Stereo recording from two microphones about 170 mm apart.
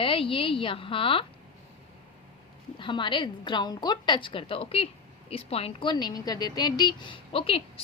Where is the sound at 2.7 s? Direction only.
30° left (ahead or behind).